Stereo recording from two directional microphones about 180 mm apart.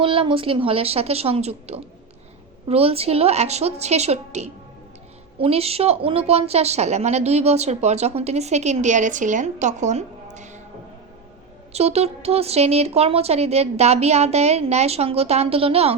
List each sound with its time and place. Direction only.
0.0 s speech: 30° right (ahead or behind)
10.3 s a sound: 40° right (ahead or behind)
11.7 s speech: 35° right (ahead or behind)